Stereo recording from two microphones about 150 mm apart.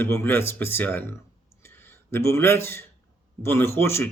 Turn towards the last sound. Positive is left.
turn(degrees=15)  # may be behind; listen again after turning